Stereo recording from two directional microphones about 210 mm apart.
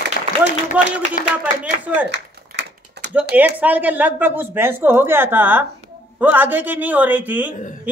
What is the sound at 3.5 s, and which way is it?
A man's voice, 10° right (ahead or behind).